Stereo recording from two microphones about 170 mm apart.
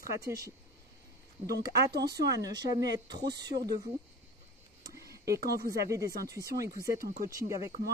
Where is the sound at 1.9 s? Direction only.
75° right (ahead or behind).